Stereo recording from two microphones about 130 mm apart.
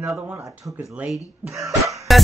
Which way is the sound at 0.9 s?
5° right (ahead or behind).